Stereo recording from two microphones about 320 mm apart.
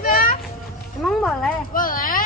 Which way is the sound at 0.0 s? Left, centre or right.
Left.